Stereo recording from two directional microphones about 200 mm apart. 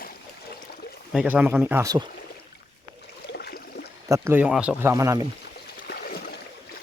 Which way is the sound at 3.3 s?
55° left (ahead or behind).